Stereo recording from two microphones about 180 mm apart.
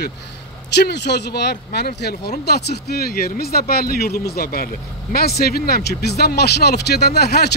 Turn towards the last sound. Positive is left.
turn(degrees=65)  # may be behind; listen again after turning